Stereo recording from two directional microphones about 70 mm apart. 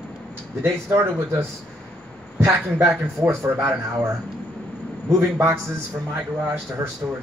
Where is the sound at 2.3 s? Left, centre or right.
Right.